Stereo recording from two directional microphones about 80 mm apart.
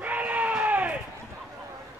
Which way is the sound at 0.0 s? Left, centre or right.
Centre.